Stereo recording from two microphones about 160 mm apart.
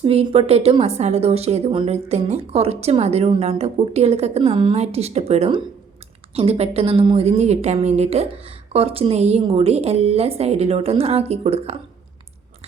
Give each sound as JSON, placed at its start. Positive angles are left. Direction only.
{"t": 0.0, "sound": "a woman's voice", "side_deg": -40}